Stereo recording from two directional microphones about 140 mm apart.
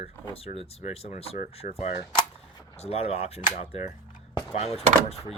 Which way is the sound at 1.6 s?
60° left (ahead or behind).